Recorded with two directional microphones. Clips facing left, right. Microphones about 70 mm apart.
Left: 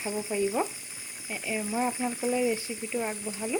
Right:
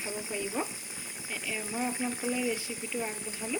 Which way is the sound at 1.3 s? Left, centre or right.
Left.